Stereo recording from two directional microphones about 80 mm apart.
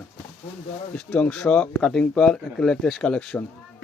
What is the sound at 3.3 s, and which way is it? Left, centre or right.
Speech, left.